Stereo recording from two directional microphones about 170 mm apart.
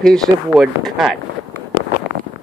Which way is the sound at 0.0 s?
Centre (ahead or behind).